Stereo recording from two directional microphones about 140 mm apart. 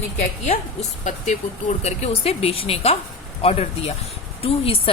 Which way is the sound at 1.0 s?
60° left (ahead or behind).